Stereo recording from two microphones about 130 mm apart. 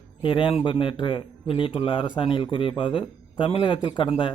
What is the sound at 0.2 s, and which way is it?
Speech, 40° left (ahead or behind).